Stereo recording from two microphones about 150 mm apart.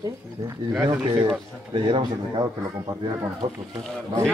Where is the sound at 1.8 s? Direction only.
35° right (ahead or behind).